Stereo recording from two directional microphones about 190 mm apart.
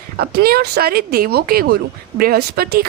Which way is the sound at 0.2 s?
55° right (ahead or behind).